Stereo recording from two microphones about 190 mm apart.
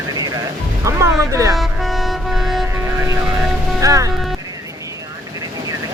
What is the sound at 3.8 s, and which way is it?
Music, 15° right (ahead or behind).